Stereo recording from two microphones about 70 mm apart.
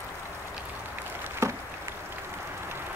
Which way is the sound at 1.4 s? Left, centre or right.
Right.